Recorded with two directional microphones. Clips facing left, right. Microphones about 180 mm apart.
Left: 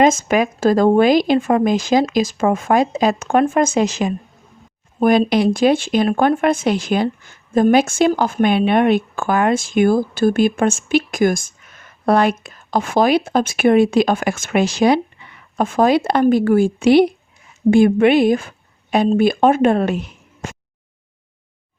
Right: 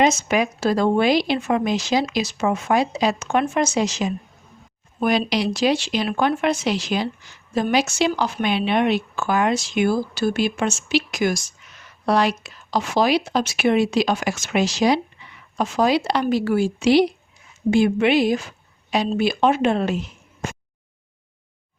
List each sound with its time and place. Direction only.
0.0 s speech: 50° left (ahead or behind)